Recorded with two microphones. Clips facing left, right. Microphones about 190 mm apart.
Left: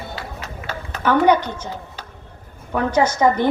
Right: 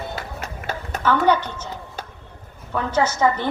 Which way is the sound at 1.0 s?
15° left (ahead or behind).